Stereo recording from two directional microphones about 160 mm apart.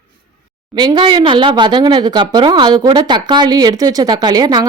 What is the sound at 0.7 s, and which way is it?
Speech, 30° right (ahead or behind).